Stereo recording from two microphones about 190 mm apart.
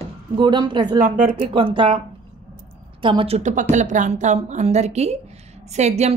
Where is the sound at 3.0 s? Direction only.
30° right (ahead or behind).